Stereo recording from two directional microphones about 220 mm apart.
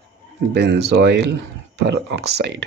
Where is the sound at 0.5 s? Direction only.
50° right (ahead or behind).